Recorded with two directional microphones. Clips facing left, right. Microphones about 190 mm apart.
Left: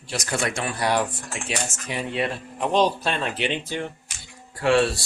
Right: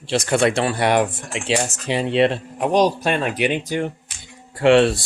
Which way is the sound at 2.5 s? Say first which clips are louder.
Right 2 dB; 15° right (ahead or behind).